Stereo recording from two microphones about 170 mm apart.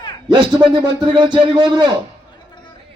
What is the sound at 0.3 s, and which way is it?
A man's voice, 25° right (ahead or behind).